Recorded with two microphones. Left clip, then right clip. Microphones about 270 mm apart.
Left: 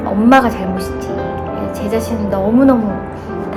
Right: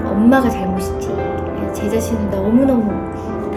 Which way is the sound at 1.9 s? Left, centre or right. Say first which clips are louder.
Left 2 dB; centre.